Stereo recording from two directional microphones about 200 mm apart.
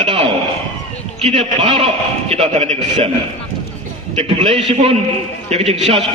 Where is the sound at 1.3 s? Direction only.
30° right (ahead or behind).